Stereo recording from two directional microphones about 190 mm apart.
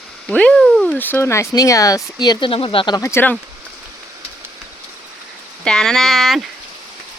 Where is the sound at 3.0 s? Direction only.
15° left (ahead or behind).